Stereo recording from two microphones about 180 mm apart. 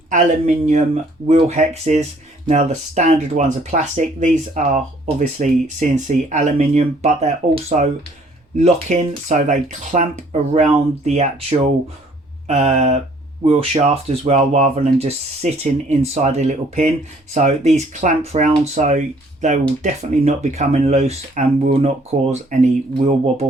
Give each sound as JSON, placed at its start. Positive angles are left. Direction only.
{"t": 0.1, "sound": "speech", "side_deg": -40}